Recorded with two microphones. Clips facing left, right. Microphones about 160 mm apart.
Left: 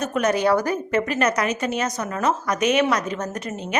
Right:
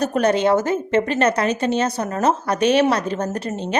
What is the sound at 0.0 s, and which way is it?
A woman's voice, 35° right (ahead or behind).